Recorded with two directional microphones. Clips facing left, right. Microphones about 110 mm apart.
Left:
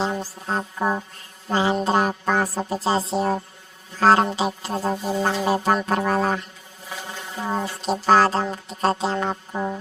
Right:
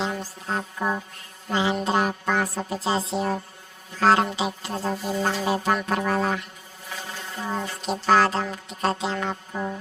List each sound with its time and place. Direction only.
0.0 s speech: 35° left (ahead or behind)
7.4 s speech: 35° left (ahead or behind)